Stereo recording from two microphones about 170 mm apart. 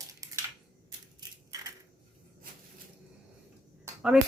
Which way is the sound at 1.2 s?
20° right (ahead or behind).